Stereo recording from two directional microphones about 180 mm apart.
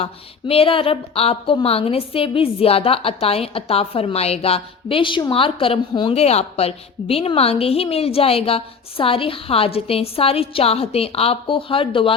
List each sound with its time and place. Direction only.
0.0 s speech: 30° left (ahead or behind)